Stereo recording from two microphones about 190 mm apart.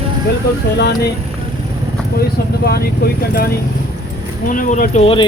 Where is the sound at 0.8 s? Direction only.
60° left (ahead or behind).